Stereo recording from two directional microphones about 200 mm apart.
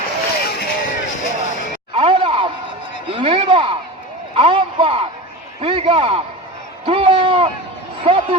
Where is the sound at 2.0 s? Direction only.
25° right (ahead or behind).